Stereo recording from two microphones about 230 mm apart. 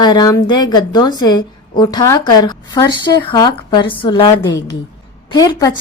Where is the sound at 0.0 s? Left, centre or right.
Centre.